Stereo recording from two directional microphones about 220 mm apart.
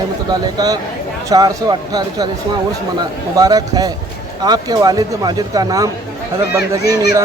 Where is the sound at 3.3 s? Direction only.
15° right (ahead or behind).